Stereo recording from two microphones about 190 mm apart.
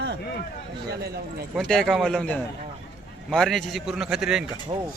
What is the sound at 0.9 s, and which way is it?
Speech, 55° right (ahead or behind).